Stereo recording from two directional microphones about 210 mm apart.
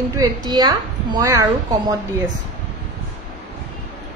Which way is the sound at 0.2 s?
15° right (ahead or behind).